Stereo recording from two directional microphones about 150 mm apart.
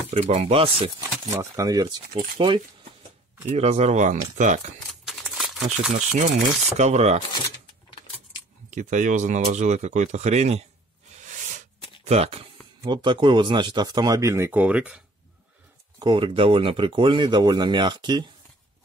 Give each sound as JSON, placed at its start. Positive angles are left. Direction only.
{"t": 0.1, "sound": "speech", "side_deg": -50}
{"t": 1.3, "sound": "speech", "side_deg": -20}
{"t": 3.4, "sound": "speech", "side_deg": -45}
{"t": 5.0, "sound": "a sound", "side_deg": 0}
{"t": 5.9, "sound": "speech", "side_deg": -50}
{"t": 8.6, "sound": "speech", "side_deg": -55}
{"t": 11.2, "sound": "a sound", "side_deg": -55}
{"t": 12.9, "sound": "speech", "side_deg": -30}
{"t": 16.0, "sound": "speech", "side_deg": -30}